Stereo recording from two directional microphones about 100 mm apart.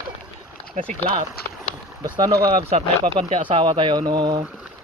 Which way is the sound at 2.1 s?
45° right (ahead or behind).